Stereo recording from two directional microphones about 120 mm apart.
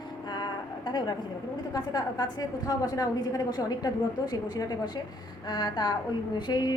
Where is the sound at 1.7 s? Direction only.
35° left (ahead or behind).